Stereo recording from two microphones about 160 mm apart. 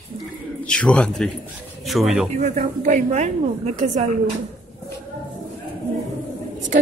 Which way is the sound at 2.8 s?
45° right (ahead or behind).